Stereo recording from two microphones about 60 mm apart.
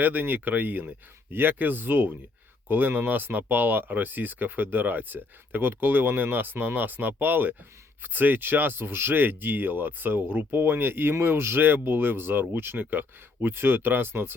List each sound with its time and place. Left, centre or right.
0.0 s speech: right